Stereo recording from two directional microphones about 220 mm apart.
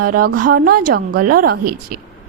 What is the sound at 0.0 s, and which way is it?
A woman's voice, 40° right (ahead or behind).